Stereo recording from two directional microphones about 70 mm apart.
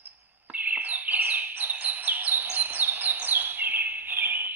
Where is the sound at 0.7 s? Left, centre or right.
Right.